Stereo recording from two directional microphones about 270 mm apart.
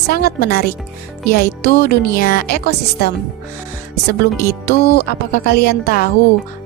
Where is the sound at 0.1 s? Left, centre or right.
Left.